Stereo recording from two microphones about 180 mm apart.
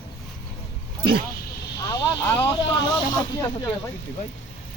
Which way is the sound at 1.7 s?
20° left (ahead or behind).